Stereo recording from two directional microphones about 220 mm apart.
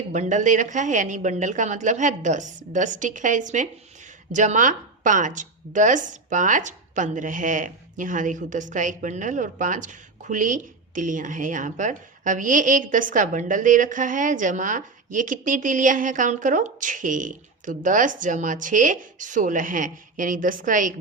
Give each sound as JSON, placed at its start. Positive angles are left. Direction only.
{"t": 0.1, "sound": "speech", "side_deg": -35}